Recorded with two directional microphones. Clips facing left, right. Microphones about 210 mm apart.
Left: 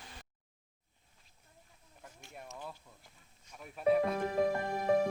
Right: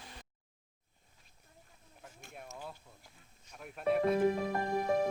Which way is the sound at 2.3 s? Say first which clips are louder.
Even; centre (ahead or behind).